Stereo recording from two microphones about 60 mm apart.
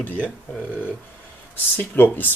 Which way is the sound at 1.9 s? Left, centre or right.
Left.